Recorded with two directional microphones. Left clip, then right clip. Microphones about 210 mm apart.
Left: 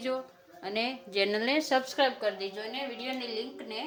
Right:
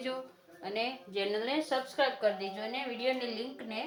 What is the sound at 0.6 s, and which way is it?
A woman's voice, 30° left (ahead or behind).